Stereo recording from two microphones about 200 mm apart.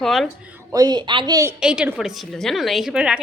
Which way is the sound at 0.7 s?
20° right (ahead or behind).